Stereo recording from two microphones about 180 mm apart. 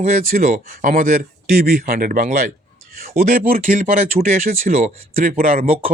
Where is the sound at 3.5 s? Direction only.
40° right (ahead or behind).